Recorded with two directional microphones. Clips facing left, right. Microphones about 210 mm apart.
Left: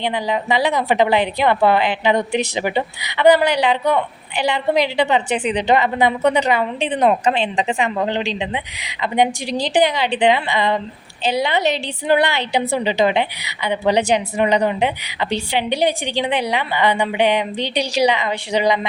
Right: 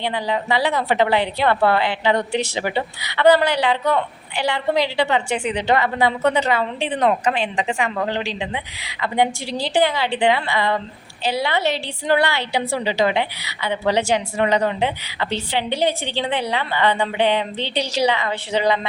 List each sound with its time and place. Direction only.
0.0 s a woman's voice: 15° left (ahead or behind)